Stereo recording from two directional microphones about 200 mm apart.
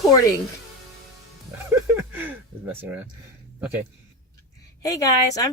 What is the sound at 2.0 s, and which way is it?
Speech, 10° right (ahead or behind).